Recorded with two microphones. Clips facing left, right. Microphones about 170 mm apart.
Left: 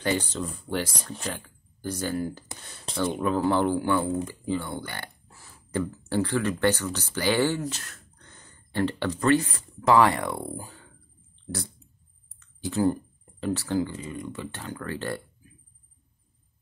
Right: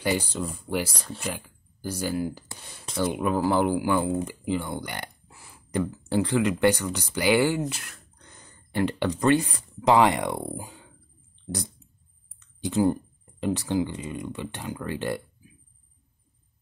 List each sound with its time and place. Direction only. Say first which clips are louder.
0.0 s speech: right 1 dB; 10° right (ahead or behind)
12.4 s clicking: right 2 dB; 20° right (ahead or behind)
13.4 s speech: right 1 dB; 15° right (ahead or behind)